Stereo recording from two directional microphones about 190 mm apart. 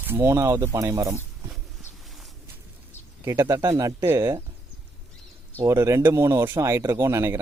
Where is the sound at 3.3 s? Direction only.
15° right (ahead or behind).